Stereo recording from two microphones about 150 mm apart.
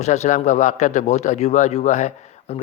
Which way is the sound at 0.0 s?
50° left (ahead or behind).